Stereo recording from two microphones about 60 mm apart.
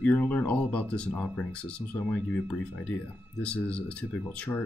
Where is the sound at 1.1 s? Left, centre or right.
Left.